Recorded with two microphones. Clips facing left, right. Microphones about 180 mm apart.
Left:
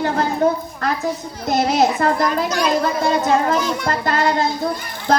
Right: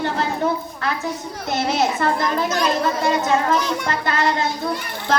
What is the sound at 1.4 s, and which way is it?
A woman's voice, 40° left (ahead or behind).